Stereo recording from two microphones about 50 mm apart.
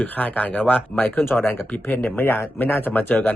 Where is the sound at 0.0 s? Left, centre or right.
Left.